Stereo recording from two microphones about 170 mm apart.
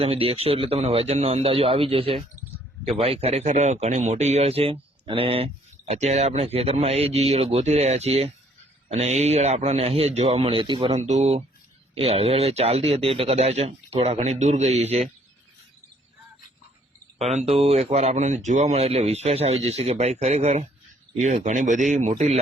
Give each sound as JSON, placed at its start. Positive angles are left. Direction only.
{"t": 0.0, "sound": "speech", "side_deg": -35}
{"t": 10.9, "sound": "speech", "side_deg": -40}
{"t": 17.3, "sound": "speech", "side_deg": -35}